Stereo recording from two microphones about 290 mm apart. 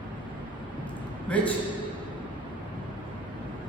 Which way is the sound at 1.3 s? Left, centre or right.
Centre.